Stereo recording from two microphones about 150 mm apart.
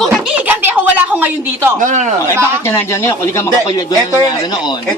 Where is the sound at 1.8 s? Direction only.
55° right (ahead or behind).